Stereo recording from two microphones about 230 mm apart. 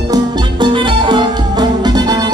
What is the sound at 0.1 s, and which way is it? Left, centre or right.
Music, centre.